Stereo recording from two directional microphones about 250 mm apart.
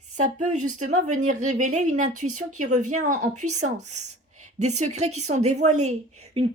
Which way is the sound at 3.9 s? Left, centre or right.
Right.